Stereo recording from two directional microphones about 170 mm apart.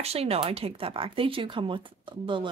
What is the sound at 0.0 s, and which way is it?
Speech, 35° right (ahead or behind).